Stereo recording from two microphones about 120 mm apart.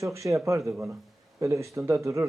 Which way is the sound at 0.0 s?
25° right (ahead or behind).